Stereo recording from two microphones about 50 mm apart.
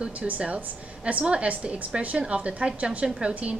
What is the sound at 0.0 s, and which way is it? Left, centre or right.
A woman's voice, right.